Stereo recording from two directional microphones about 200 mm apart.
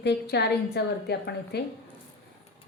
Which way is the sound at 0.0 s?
55° left (ahead or behind).